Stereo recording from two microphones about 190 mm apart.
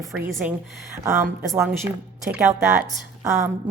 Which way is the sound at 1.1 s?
20° right (ahead or behind).